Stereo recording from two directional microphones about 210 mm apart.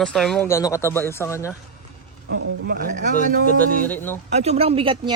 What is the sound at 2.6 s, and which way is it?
Speech, 45° right (ahead or behind).